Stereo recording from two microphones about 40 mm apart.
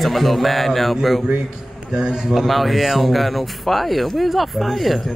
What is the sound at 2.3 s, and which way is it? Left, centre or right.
Speech, centre.